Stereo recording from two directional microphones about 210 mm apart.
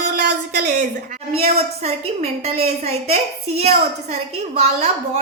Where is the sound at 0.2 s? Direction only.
50° right (ahead or behind).